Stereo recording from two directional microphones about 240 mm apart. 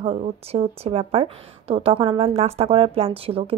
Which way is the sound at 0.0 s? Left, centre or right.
Right.